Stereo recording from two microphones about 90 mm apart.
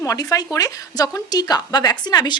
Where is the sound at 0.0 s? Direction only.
40° left (ahead or behind).